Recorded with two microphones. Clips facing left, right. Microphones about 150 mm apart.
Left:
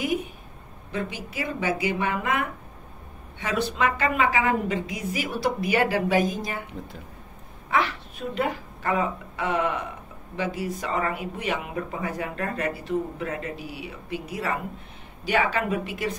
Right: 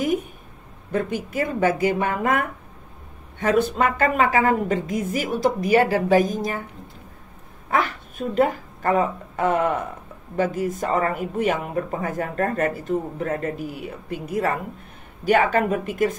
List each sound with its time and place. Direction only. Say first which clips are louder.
0.0 s a sound: right 4 dB; 45° right (ahead or behind)
0.9 s speech: right 7 dB; 50° right (ahead or behind)
7.7 s a woman's voice: right 2 dB; 45° right (ahead or behind)